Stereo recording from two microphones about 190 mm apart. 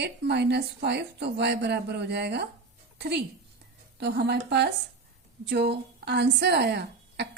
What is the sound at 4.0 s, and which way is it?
A woman's voice, 60° right (ahead or behind).